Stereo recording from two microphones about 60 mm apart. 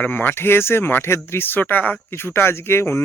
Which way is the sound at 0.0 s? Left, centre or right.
Left.